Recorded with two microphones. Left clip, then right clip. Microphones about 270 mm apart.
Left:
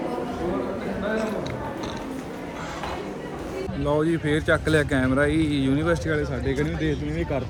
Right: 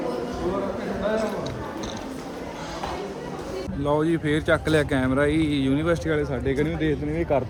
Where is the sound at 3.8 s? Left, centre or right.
Centre.